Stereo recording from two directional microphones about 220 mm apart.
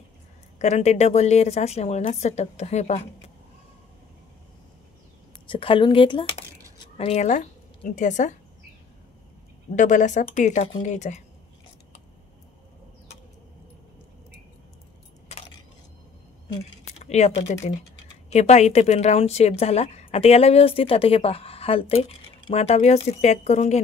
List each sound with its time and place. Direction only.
0.6 s a woman's voice: 30° left (ahead or behind)
5.5 s a woman's voice: 25° left (ahead or behind)
9.8 s a woman's voice: 35° left (ahead or behind)
17.0 s a woman's voice: 30° left (ahead or behind)